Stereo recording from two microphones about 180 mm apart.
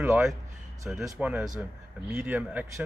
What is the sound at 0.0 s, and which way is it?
A man's voice, 10° right (ahead or behind).